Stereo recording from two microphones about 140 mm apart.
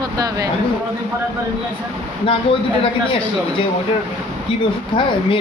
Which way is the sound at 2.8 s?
40° left (ahead or behind).